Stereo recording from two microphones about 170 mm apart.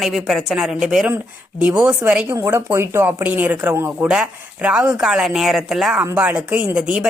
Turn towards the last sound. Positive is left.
turn(degrees=-5)  # may be behind; listen again after turning